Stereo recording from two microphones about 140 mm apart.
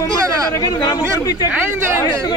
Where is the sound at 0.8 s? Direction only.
25° left (ahead or behind).